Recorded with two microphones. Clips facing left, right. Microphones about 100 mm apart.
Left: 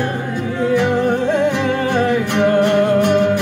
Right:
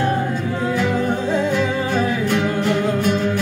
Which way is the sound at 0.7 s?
60° left (ahead or behind).